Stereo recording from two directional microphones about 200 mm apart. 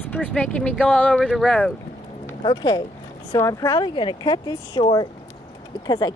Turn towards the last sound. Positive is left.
turn(degrees=20)  # may be behind; listen again after turning